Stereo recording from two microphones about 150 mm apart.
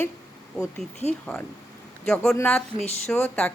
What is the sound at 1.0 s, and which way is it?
Speech, 45° left (ahead or behind).